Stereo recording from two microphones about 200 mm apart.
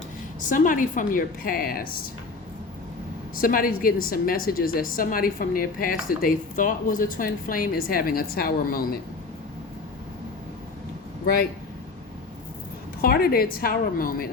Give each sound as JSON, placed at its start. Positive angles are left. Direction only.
{"t": 0.4, "sound": "a woman's voice", "side_deg": 40}
{"t": 3.3, "sound": "a woman's voice", "side_deg": 45}
{"t": 13.0, "sound": "a woman's voice", "side_deg": 50}